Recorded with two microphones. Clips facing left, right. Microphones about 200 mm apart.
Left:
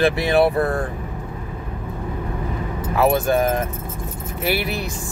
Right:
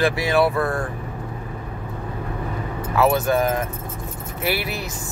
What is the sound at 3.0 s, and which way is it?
Speech, 15° left (ahead or behind).